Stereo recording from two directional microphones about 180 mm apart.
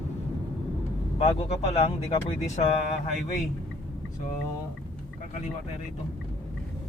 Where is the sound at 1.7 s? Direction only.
35° left (ahead or behind).